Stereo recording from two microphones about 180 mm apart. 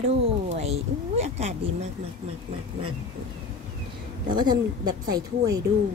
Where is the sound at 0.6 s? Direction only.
35° right (ahead or behind).